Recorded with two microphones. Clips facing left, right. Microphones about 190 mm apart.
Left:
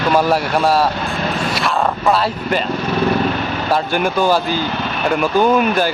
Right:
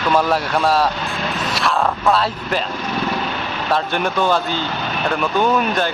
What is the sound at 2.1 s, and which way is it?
Speech, centre (ahead or behind).